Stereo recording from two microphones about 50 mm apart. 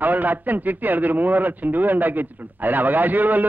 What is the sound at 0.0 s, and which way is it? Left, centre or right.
A man's voice, right.